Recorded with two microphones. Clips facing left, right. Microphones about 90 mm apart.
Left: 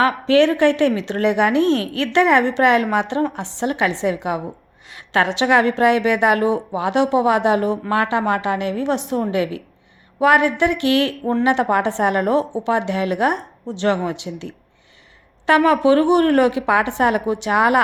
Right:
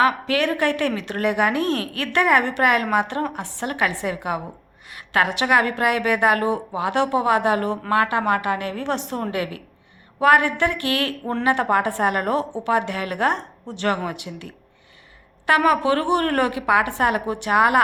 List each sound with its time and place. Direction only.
0.0 s a woman's voice: 25° left (ahead or behind)